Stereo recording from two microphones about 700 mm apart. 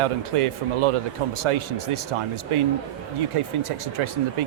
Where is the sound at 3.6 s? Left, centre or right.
Right.